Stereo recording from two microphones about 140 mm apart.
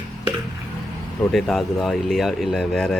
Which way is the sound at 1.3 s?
Centre (ahead or behind).